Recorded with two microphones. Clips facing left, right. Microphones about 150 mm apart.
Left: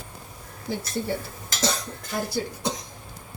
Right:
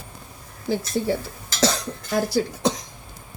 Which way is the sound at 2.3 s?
85° right.